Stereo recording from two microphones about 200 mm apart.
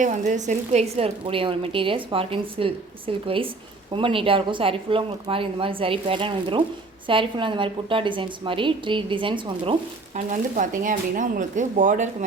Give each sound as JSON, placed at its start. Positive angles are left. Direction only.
{"t": 0.0, "sound": "a woman's voice", "side_deg": -35}
{"t": 10.2, "sound": "a woman's voice", "side_deg": -40}